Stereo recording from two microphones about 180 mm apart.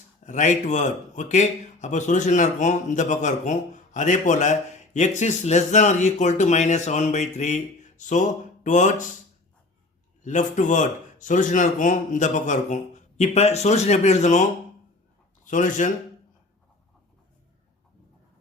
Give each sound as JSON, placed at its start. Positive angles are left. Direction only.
{"t": 0.3, "sound": "speech", "side_deg": 45}
{"t": 10.2, "sound": "speech", "side_deg": 45}
{"t": 15.4, "sound": "a man's voice", "side_deg": 45}